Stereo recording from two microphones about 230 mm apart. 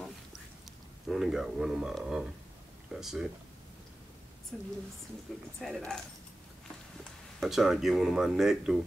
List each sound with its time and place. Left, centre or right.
1.0 s speech: centre
4.5 s speech: centre
7.3 s speech: centre